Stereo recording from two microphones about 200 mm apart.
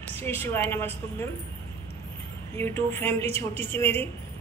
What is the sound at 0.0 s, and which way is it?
Speech, 10° left (ahead or behind).